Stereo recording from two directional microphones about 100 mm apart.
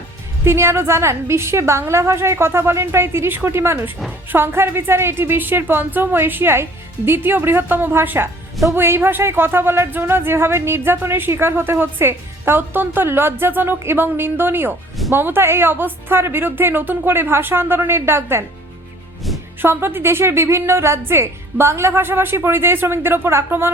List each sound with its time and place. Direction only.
0.4 s speech: 25° right (ahead or behind)
19.6 s speech: 25° right (ahead or behind)